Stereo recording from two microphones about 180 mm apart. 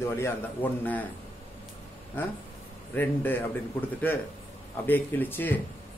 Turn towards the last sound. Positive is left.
turn(degrees=10)  # may be behind; listen again after turning